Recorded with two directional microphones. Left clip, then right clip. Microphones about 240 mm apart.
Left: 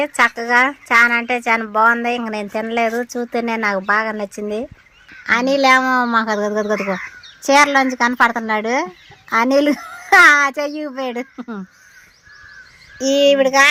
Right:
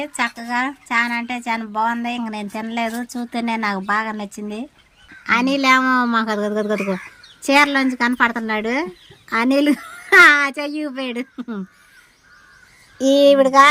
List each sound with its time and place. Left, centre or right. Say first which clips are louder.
0.0 s speech: left 7 dB; centre
13.0 s a child's voice: right 1 dB; centre